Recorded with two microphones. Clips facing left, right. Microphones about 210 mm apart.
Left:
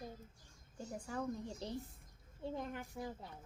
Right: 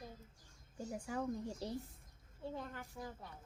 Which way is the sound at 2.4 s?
15° left (ahead or behind).